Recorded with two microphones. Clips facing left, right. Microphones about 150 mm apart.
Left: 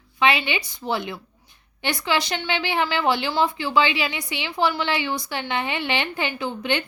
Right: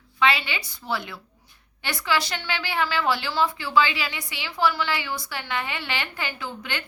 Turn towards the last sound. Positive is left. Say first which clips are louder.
# left 8 dB
turn(degrees=20)  # may be behind; listen again after turning